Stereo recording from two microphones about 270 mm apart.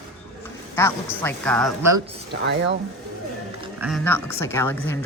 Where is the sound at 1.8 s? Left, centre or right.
Right.